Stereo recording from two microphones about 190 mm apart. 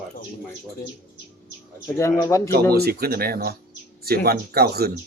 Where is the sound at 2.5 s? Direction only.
55° right (ahead or behind).